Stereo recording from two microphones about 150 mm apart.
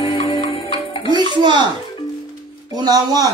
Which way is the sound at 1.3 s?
30° right (ahead or behind).